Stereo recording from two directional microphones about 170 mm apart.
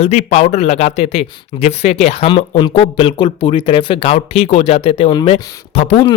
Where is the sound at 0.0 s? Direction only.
40° left (ahead or behind).